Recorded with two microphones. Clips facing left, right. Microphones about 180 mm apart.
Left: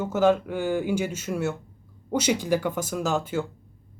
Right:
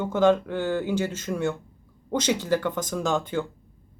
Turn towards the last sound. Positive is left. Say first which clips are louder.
# even
turn(degrees=5)  # may be behind; listen again after turning